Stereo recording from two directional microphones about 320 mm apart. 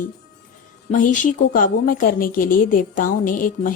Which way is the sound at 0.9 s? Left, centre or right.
Left.